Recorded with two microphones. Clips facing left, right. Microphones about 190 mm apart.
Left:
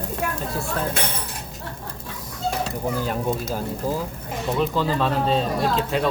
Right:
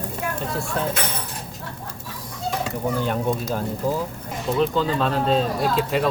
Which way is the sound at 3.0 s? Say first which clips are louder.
Right 1 dB; 5° left (ahead or behind).